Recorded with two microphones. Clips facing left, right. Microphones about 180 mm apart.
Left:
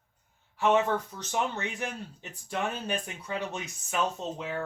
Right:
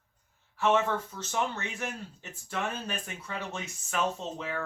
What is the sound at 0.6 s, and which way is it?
Speech, 15° left (ahead or behind).